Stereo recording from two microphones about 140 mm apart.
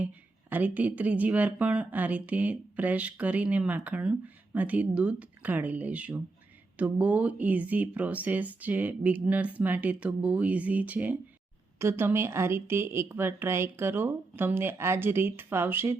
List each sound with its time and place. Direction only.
0.0 s speech: 10° right (ahead or behind)